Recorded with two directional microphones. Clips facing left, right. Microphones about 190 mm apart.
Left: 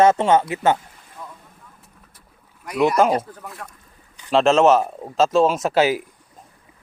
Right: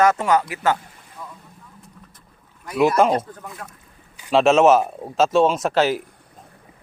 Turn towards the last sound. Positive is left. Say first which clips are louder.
# left 1 dB
turn(degrees=10)  # may be behind; listen again after turning